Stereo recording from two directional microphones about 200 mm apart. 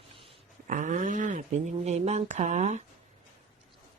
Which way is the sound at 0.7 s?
40° right (ahead or behind).